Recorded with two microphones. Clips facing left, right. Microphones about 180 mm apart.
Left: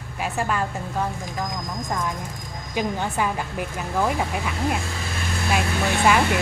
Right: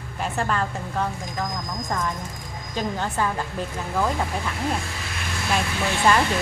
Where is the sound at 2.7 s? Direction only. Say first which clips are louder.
Left 2 dB; 10° left (ahead or behind).